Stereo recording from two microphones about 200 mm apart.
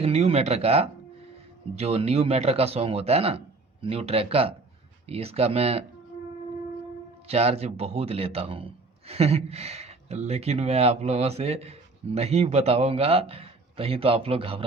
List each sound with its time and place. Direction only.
0.0 s a sound: 30° right (ahead or behind)
1.7 s a man's voice: 30° right (ahead or behind)
7.3 s a man's voice: 30° right (ahead or behind)